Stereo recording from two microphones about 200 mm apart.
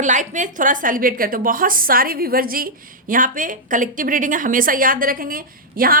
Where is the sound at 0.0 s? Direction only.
40° right (ahead or behind).